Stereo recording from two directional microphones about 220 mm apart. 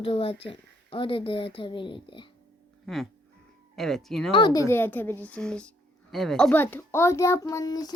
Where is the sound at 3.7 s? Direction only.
Centre (ahead or behind).